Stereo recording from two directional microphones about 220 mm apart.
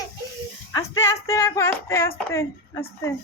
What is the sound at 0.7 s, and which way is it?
Speech, 15° left (ahead or behind).